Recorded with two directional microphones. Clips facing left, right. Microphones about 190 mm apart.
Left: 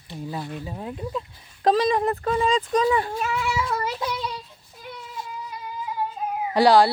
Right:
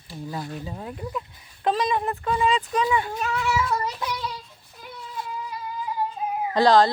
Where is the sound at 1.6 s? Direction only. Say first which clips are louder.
Left 4 dB; 35° left (ahead or behind).